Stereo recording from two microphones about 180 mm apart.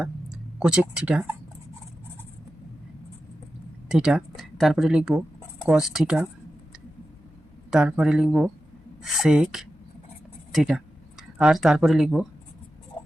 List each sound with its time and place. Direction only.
0.0 s speech: 5° right (ahead or behind)
3.8 s speech: 5° right (ahead or behind)
7.7 s speech: 5° right (ahead or behind)